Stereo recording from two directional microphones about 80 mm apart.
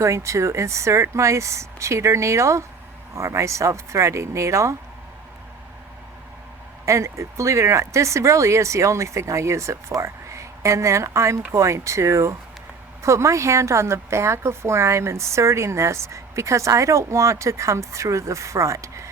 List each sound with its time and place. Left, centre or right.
0.0 s a woman's voice: right
6.8 s a woman's voice: right